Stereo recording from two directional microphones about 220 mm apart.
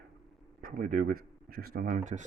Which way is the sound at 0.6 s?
35° right (ahead or behind).